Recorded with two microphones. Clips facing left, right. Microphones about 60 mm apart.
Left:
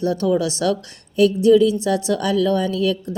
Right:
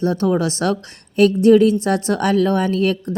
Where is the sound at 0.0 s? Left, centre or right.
Right.